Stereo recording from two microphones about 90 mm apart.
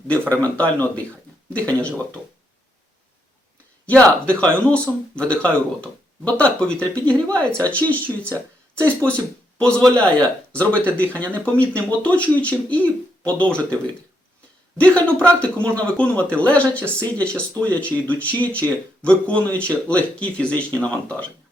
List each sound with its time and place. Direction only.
0.1 s speech: 15° left (ahead or behind)
3.8 s speech: 15° left (ahead or behind)
9.6 s speech: 10° left (ahead or behind)
14.8 s speech: 15° left (ahead or behind)